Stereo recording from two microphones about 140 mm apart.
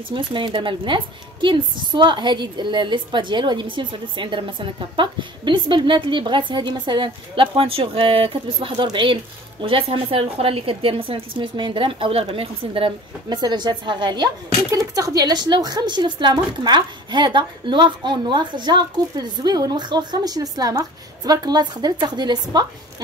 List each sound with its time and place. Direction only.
0.1 s speech: 35° right (ahead or behind)